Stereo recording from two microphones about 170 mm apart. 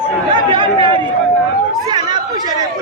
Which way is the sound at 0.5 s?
30° right (ahead or behind).